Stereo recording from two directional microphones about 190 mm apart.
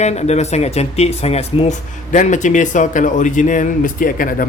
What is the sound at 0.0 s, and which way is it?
Speech, 35° left (ahead or behind).